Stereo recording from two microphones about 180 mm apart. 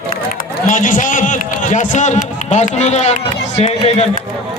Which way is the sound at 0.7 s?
45° left (ahead or behind).